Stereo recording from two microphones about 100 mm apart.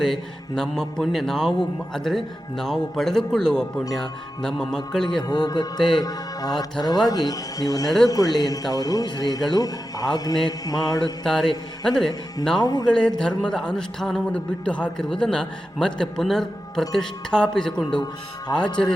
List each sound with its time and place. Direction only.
0.0 s a man's voice: 5° left (ahead or behind)
5.3 s a man's voice: 45° left (ahead or behind)
11.3 s a man's voice: 5° left (ahead or behind)
12.5 s a man's voice: 40° left (ahead or behind)
13.1 s a man's voice: 5° left (ahead or behind)
18.0 s speech: 45° left (ahead or behind)